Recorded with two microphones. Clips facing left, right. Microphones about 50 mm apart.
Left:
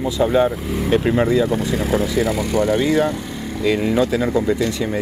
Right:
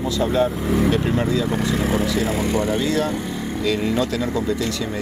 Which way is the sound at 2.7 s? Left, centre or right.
Left.